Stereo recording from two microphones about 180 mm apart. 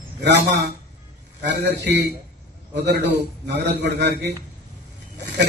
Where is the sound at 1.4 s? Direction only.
70° right (ahead or behind).